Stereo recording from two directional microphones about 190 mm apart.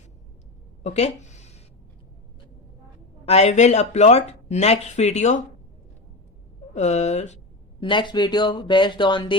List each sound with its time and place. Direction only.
0.9 s speech: 35° left (ahead or behind)
3.2 s speech: 35° left (ahead or behind)
6.7 s speech: 35° left (ahead or behind)
7.8 s speech: 25° left (ahead or behind)